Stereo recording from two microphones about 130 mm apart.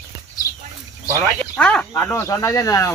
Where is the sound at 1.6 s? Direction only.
10° left (ahead or behind).